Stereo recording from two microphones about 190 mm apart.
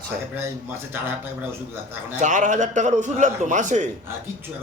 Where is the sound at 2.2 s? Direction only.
40° right (ahead or behind).